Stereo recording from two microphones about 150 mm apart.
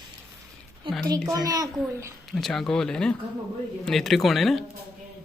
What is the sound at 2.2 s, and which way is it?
Speech, centre (ahead or behind).